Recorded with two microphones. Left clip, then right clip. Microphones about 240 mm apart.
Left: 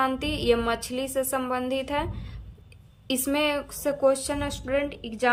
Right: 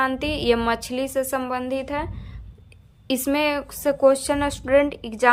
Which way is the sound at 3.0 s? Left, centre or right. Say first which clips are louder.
Right 3 dB; centre.